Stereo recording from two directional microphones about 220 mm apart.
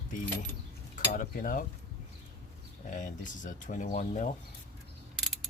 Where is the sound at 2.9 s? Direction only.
35° left (ahead or behind).